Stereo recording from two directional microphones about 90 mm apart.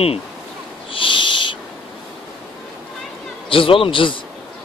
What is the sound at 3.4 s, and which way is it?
Speech, 75° left (ahead or behind).